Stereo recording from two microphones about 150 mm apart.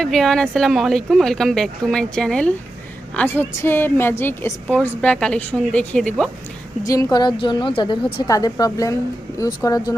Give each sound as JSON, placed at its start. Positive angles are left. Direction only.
{"t": 0.0, "sound": "a woman's voice", "side_deg": 0}
{"t": 6.8, "sound": "a woman's voice", "side_deg": 20}